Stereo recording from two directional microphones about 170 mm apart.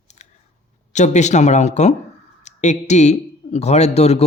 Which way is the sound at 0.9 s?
45° left (ahead or behind).